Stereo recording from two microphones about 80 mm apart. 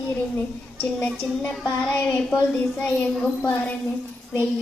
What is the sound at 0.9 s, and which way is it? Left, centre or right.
Child singing, centre.